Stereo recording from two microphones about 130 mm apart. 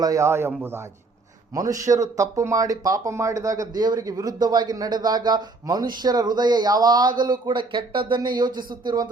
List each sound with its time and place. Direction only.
0.0 s speech: 25° right (ahead or behind)